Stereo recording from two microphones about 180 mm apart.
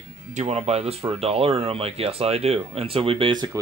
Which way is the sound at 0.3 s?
35° right (ahead or behind).